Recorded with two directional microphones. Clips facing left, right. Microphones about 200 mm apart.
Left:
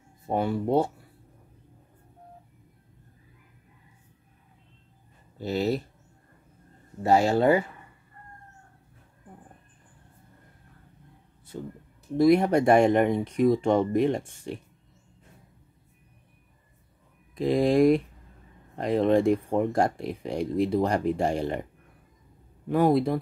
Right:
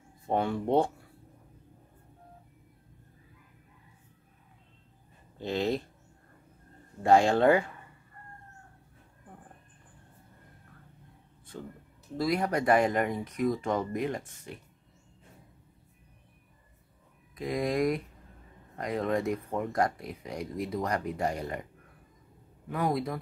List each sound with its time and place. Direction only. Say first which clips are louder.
0.3 s speech: left 2 dB; 5° left (ahead or behind)
5.4 s speech: left 3 dB; 5° left (ahead or behind)
7.0 s speech: left 1 dB; 5° left (ahead or behind)
12.2 s speech: left 9 dB; 25° left (ahead or behind)
17.4 s speech: left 8 dB; 30° left (ahead or behind)
22.7 s speech: left 8 dB; 30° left (ahead or behind)